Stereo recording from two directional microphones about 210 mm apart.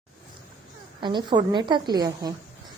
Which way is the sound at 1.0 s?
20° right (ahead or behind).